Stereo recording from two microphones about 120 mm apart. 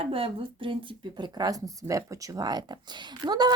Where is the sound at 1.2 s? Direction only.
35° right (ahead or behind).